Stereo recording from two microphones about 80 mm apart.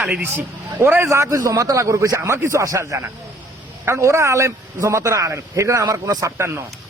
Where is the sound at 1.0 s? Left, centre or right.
Right.